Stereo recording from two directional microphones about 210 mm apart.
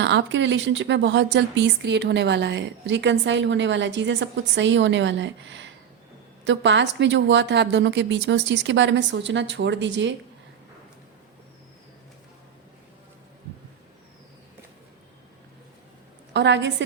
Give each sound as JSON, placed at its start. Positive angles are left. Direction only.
{"t": 0.0, "sound": "a woman's voice", "side_deg": -60}
{"t": 16.3, "sound": "a woman's voice", "side_deg": -55}